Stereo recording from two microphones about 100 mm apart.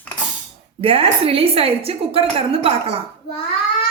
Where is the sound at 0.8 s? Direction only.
70° right (ahead or behind).